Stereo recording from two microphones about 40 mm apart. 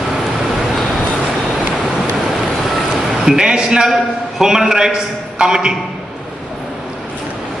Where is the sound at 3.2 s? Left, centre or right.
Centre.